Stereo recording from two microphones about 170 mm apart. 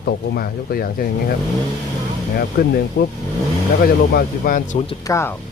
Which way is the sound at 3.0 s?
80° left.